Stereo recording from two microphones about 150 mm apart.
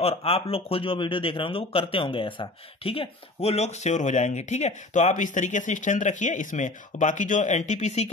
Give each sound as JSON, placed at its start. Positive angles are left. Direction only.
{"t": 0.0, "sound": "a man's voice", "side_deg": 40}